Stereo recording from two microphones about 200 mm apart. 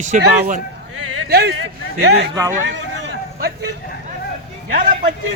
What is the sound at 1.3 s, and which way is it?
Speech, 55° right (ahead or behind).